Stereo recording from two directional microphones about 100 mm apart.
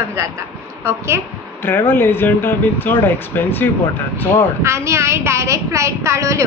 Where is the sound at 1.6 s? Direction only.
20° left (ahead or behind).